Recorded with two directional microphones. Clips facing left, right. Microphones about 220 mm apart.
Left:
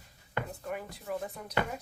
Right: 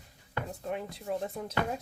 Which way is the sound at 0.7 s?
25° right (ahead or behind).